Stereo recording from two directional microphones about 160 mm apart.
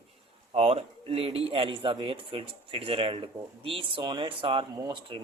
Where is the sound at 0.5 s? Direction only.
35° right (ahead or behind).